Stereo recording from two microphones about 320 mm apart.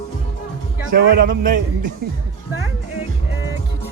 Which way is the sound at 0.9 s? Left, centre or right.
Right.